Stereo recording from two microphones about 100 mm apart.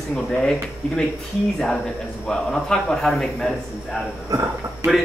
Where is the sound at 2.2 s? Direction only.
10° left (ahead or behind).